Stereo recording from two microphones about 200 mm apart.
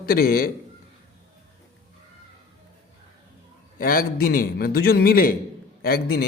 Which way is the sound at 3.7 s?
45° left (ahead or behind).